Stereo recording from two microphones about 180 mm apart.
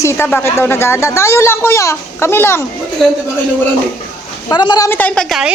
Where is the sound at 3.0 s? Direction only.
Centre (ahead or behind).